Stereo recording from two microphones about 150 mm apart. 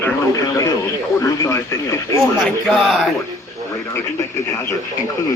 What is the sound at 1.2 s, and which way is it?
Speech, 20° left (ahead or behind).